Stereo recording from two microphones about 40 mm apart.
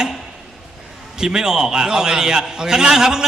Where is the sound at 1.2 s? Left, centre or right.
Centre.